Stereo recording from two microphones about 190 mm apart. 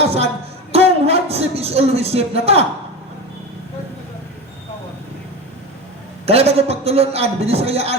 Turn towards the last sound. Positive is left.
turn(degrees=-30)  # may be behind; listen again after turning